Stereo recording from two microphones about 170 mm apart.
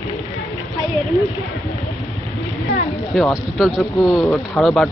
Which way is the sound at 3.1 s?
Centre (ahead or behind).